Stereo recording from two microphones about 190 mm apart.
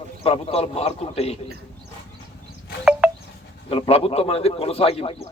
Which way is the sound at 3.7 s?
30° left (ahead or behind).